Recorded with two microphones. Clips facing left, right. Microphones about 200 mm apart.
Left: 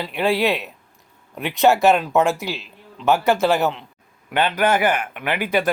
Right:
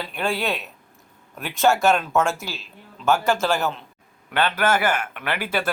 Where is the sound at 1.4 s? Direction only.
20° left (ahead or behind).